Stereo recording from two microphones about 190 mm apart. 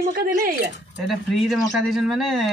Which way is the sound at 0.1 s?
50° right (ahead or behind).